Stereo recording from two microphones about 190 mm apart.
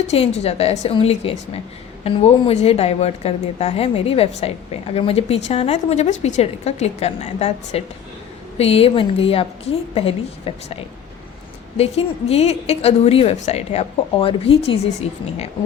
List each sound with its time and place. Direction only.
0.1 s a woman's voice: 35° left (ahead or behind)
11.8 s a woman's voice: 30° left (ahead or behind)